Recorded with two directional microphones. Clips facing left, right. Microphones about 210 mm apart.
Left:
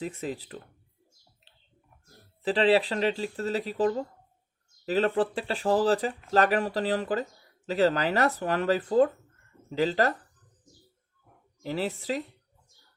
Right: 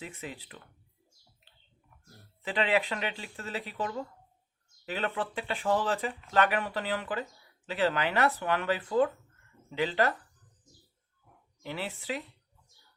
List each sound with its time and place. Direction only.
0.0 s speech: 40° left (ahead or behind)
2.4 s speech: 35° left (ahead or behind)
11.6 s speech: 40° left (ahead or behind)